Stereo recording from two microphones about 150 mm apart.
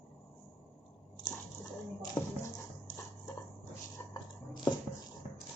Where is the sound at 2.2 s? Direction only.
25° left (ahead or behind).